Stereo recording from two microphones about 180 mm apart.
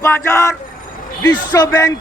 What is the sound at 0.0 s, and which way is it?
Speech, 15° left (ahead or behind).